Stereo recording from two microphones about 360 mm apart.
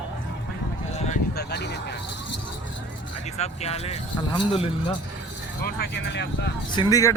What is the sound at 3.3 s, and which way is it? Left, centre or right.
Speech, centre.